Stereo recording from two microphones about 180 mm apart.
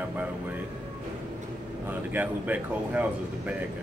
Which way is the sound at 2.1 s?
10° right (ahead or behind).